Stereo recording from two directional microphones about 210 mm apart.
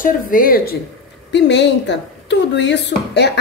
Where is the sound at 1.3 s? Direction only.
55° left (ahead or behind).